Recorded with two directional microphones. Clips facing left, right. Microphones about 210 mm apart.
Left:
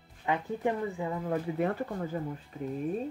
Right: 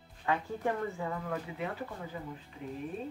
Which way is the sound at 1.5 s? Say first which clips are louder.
Left 8 dB; 45° left (ahead or behind).